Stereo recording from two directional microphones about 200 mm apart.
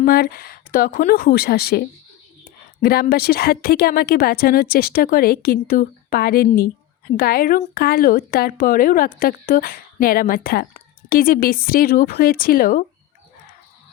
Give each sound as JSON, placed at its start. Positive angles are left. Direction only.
{"t": 0.0, "sound": "a woman's voice", "side_deg": 50}
{"t": 2.8, "sound": "a woman's voice", "side_deg": 50}